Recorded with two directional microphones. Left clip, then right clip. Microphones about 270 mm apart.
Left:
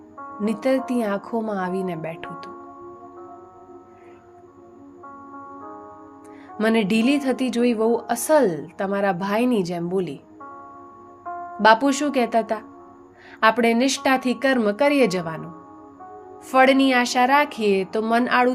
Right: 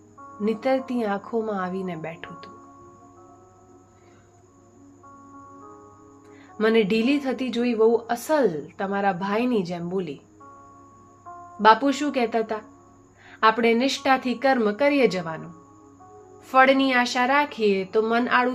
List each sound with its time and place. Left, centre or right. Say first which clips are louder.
0.3 s a woman's voice: left 1 dB; left
6.6 s a woman's voice: even; left
11.3 s music: left 9 dB; left
11.6 s a woman's voice: left 1 dB; left
16.5 s a woman's voice: left 1 dB; left